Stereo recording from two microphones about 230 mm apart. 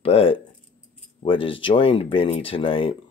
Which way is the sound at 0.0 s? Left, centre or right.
Left.